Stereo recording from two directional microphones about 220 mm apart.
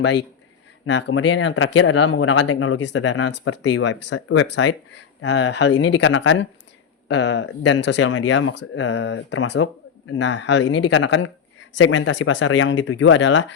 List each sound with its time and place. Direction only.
0.9 s speech: 55° left (ahead or behind)